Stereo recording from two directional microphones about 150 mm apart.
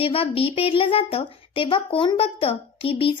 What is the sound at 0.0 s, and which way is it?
A woman's voice, 40° left (ahead or behind).